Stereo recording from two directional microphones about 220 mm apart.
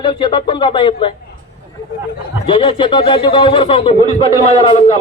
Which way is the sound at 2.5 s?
25° left (ahead or behind).